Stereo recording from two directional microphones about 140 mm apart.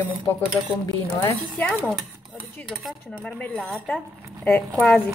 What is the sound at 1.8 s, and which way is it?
Speech, centre (ahead or behind).